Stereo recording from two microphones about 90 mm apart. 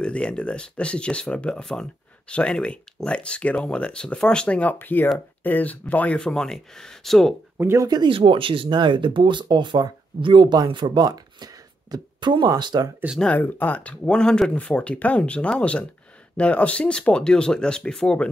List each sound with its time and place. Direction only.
0.0 s speech: 10° left (ahead or behind)
7.5 s speech: 25° right (ahead or behind)
7.8 s speech: 50° right (ahead or behind)
8.1 s speech: 75° right (ahead or behind); by 12.9 s 50° right (ahead or behind)
13.2 s speech: 15° left (ahead or behind)